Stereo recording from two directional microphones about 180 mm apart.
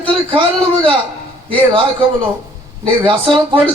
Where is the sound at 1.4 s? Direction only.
30° right (ahead or behind).